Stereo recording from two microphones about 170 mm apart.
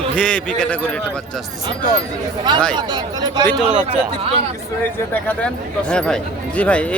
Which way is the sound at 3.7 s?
45° right (ahead or behind).